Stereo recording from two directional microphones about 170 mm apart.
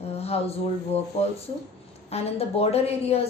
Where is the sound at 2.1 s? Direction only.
35° left (ahead or behind).